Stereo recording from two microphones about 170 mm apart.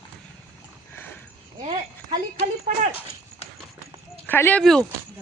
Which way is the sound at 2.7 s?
50° right (ahead or behind).